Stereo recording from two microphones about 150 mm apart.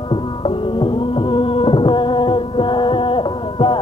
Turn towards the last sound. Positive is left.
turn(degrees=35)  # may be behind; listen again after turning